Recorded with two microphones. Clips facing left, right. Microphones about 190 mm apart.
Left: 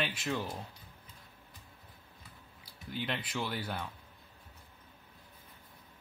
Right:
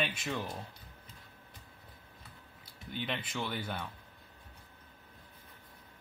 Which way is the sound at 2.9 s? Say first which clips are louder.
Left 1 dB; 5° left (ahead or behind).